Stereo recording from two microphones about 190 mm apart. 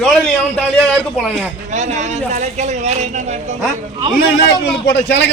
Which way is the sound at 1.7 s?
40° right (ahead or behind).